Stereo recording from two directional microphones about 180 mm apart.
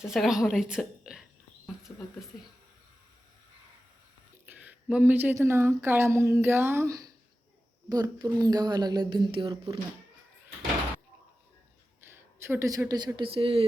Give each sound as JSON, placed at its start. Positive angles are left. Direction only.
{"t": 0.0, "sound": "a woman's voice", "side_deg": 0}
{"t": 1.6, "sound": "a sound", "side_deg": 0}
{"t": 4.5, "sound": "speech", "side_deg": -10}
{"t": 11.9, "sound": "speech", "side_deg": -10}